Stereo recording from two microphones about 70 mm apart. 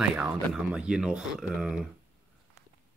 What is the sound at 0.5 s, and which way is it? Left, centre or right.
Speech, centre.